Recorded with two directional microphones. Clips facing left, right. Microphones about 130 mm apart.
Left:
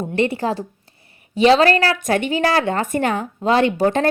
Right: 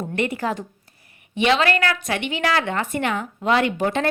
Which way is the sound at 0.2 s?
30° left (ahead or behind).